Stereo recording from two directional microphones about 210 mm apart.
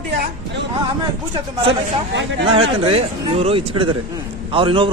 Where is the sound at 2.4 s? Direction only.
25° right (ahead or behind).